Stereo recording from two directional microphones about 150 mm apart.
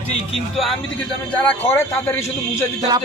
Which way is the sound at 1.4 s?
15° left (ahead or behind).